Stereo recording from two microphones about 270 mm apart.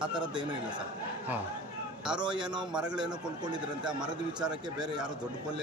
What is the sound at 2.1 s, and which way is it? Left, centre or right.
Speech, centre.